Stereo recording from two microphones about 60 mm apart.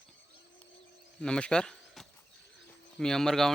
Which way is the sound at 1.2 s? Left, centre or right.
Centre.